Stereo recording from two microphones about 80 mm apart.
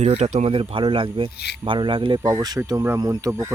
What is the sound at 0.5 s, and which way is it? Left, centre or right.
Speech, right.